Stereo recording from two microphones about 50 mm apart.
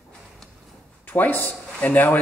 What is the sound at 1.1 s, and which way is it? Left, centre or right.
Speech, left.